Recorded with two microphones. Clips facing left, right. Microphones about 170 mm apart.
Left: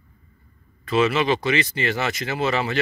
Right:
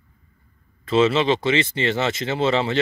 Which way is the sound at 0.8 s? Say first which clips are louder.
Right 2 dB; 25° right (ahead or behind).